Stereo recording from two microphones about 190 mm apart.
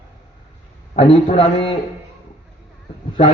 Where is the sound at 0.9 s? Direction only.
30° left (ahead or behind).